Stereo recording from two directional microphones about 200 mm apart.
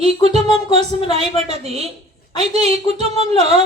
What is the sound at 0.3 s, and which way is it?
A woman's voice, 30° right (ahead or behind).